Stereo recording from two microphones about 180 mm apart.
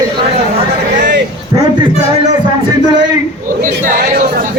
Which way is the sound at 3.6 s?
45° right (ahead or behind).